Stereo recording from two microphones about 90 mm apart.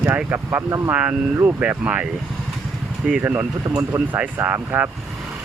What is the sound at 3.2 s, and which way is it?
Speech, 20° right (ahead or behind).